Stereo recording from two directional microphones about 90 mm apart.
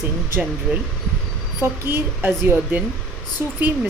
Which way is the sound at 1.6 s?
25° right (ahead or behind).